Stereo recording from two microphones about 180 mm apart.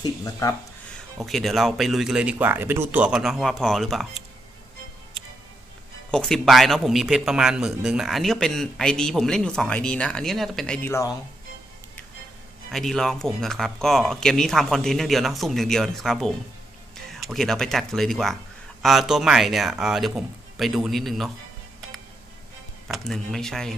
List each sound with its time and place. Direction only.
0.0 s speech: 20° left (ahead or behind)
1.2 s a man's voice: centre (ahead or behind)
6.1 s a man's voice: 5° left (ahead or behind)
10.8 s speech: 15° left (ahead or behind)
12.7 s a man's voice: centre (ahead or behind)
22.9 s a man's voice: centre (ahead or behind)